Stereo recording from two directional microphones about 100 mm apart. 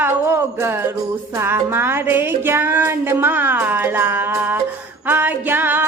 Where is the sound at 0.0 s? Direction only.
25° right (ahead or behind).